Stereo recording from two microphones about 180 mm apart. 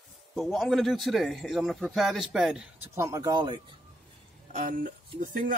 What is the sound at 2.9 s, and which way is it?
Speech, 15° right (ahead or behind).